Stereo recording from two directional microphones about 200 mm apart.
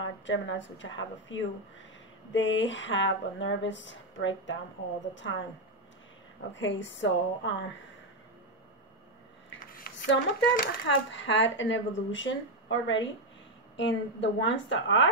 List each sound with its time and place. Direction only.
0.0 s speech: 65° left (ahead or behind)
6.5 s speech: 65° left (ahead or behind)
9.7 s speech: 45° left (ahead or behind); by 15.0 s 65° left (ahead or behind)